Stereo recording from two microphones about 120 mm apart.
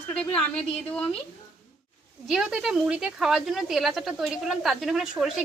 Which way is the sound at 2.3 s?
5° right (ahead or behind).